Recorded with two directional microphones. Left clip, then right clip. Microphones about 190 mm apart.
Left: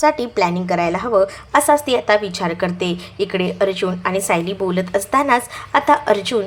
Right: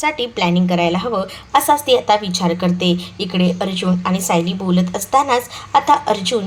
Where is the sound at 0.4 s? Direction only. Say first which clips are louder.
Right 2 dB; 30° left (ahead or behind).